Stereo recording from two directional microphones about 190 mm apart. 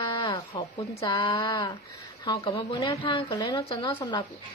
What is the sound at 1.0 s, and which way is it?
A woman's voice, 20° left (ahead or behind).